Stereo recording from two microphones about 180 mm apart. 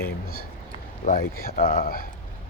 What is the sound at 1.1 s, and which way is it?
Speech, 55° left (ahead or behind).